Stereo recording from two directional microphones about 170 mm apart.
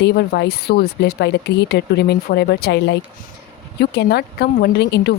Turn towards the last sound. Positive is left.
turn(degrees=85)